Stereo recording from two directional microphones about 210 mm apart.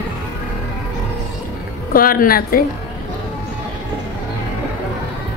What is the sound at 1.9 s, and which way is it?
Speech, 45° left (ahead or behind).